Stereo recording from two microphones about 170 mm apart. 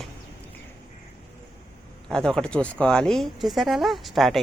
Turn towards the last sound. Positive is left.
turn(degrees=0)  # may be behind; listen again after turning